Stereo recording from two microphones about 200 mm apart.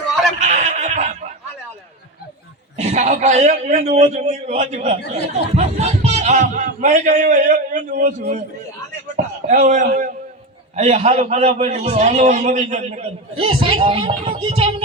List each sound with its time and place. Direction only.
0.3 s a sound: 35° right (ahead or behind)
2.9 s a man's voice: 35° right (ahead or behind)
4.9 s speech: 55° left (ahead or behind)
5.5 s a man's voice: 35° right (ahead or behind)
9.1 s a sound: 40° right (ahead or behind)
10.8 s a man's voice: 35° right (ahead or behind)